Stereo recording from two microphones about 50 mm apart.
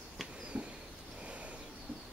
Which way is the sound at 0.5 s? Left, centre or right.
Centre.